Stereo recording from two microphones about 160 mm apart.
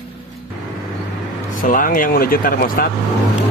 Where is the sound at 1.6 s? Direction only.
60° left (ahead or behind).